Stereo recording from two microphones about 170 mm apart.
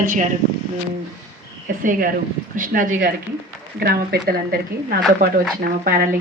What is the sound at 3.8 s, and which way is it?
Speech, 60° right (ahead or behind).